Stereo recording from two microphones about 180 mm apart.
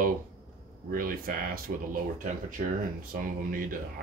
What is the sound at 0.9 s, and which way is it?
Speech, 55° right (ahead or behind).